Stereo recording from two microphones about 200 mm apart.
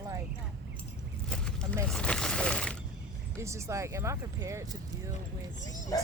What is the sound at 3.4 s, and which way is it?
Speech, 15° right (ahead or behind).